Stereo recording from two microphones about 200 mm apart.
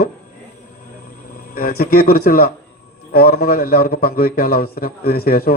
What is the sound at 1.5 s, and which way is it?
A man's voice, 45° left (ahead or behind).